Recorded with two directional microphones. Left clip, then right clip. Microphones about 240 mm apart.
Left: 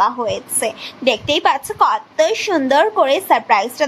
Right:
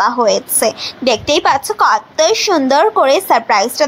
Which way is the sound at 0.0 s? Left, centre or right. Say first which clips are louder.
Right 5 dB; right.